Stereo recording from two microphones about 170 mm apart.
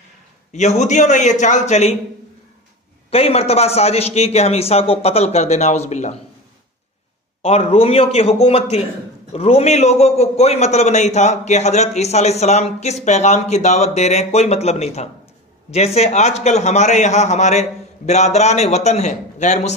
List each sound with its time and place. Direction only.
0.5 s a man's voice: 45° left (ahead or behind)
3.1 s a man's voice: 35° left (ahead or behind)
7.4 s a man's voice: 35° left (ahead or behind)